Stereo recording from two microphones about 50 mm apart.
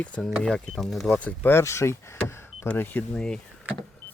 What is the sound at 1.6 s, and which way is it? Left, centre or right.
Speech, left.